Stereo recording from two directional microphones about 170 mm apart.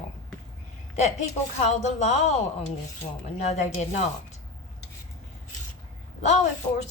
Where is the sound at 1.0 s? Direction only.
45° left (ahead or behind).